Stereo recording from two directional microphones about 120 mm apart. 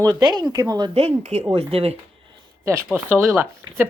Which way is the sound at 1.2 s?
60° right (ahead or behind).